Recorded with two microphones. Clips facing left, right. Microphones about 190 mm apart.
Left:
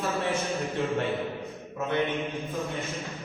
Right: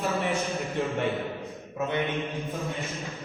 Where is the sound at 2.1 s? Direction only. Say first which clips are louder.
Even; centre (ahead or behind).